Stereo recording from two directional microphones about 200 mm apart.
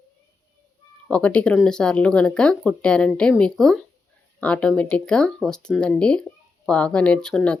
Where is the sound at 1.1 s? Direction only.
5° left (ahead or behind).